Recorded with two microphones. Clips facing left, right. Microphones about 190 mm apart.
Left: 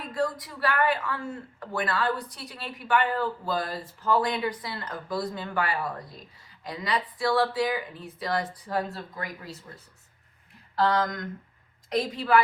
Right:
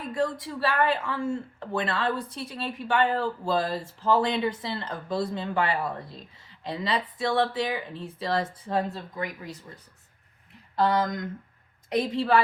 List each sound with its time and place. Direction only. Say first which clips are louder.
0.1 s speech: right 1 dB; 25° right (ahead or behind)
10.8 s speech: right 1 dB; 20° right (ahead or behind)